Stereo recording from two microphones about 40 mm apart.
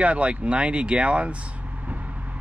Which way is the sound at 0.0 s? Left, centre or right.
Right.